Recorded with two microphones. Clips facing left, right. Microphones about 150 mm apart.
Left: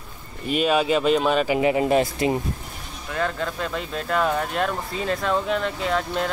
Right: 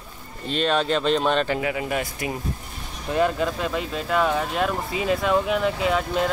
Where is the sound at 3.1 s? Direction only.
15° right (ahead or behind).